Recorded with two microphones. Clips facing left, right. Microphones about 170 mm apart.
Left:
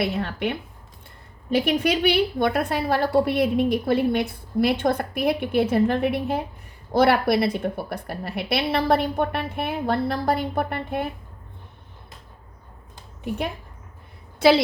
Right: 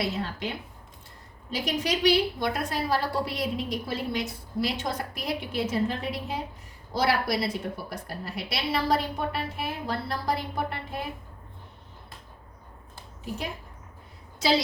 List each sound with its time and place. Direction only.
0.0 s a woman's voice: 60° left (ahead or behind)
14.3 s a woman's voice: 60° left (ahead or behind)